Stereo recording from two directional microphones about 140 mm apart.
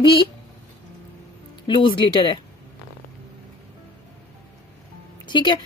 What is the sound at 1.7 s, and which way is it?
Speech, 35° left (ahead or behind).